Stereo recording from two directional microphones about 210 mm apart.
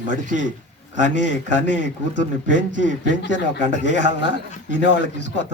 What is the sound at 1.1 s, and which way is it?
A man's voice, 60° left (ahead or behind).